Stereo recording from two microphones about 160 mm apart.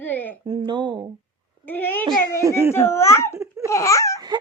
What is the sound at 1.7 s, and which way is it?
Speech, 10° left (ahead or behind).